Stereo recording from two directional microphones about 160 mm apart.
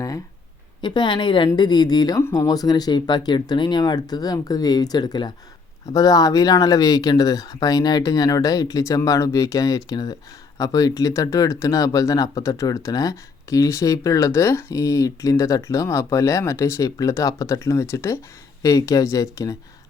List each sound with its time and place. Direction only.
0.8 s speech: 30° left (ahead or behind)